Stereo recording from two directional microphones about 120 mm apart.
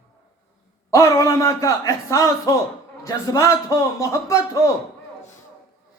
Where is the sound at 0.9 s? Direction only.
25° left (ahead or behind).